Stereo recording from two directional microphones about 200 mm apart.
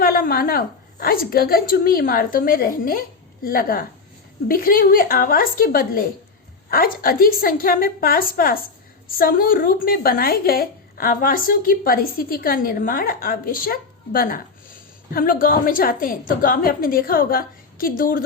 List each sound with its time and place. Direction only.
0.0 s a woman's voice: 45° left (ahead or behind)